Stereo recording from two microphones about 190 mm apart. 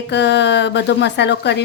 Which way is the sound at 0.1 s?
65° left (ahead or behind).